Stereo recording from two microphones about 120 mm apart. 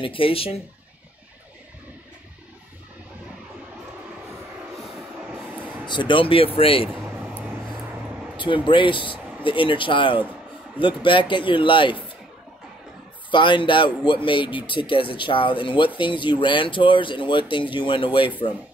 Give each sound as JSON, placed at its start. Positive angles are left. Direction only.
{"t": 0.0, "sound": "a man's voice", "side_deg": 45}
{"t": 5.9, "sound": "a man's voice", "side_deg": 40}
{"t": 8.6, "sound": "a man's voice", "side_deg": 45}
{"t": 13.3, "sound": "a man's voice", "side_deg": 45}